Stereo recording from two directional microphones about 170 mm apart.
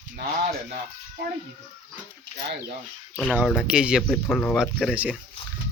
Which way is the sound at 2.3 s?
90° right.